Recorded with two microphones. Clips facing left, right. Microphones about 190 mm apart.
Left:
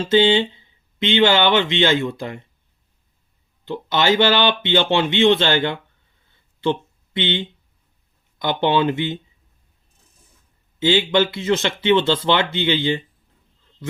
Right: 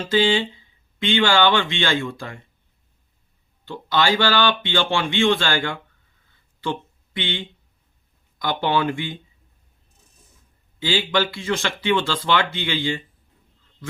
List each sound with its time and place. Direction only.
0.0 s speech: 25° left (ahead or behind)
3.7 s speech: 20° left (ahead or behind)
6.6 s a sound: 25° left (ahead or behind)
8.4 s speech: 25° left (ahead or behind)
10.8 s speech: 25° left (ahead or behind)